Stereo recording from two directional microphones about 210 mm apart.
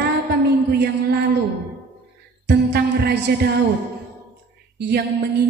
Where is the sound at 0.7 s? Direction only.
55° right (ahead or behind).